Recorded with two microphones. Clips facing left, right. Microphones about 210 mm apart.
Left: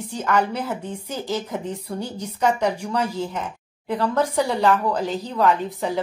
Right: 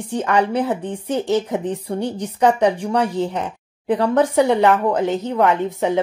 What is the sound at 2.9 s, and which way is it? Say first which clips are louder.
A woman's voice: right 5 dB; 70° right (ahead or behind).